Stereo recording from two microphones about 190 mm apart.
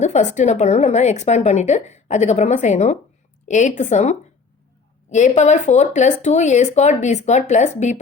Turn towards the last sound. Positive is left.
turn(degrees=35)  # may be behind; listen again after turning